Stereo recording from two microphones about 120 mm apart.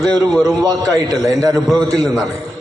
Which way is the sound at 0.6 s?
30° right (ahead or behind).